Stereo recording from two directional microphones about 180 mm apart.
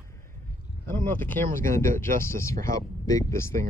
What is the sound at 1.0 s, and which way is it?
Speech, 10° left (ahead or behind).